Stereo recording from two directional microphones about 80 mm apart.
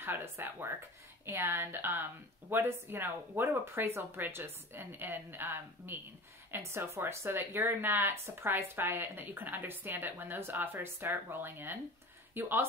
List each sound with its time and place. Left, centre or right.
0.0 s speech: right